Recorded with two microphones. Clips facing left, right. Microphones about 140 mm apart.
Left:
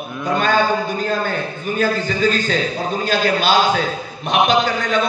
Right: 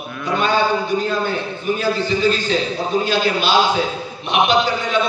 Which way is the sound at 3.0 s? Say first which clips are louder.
Left 2 dB; 45° left (ahead or behind).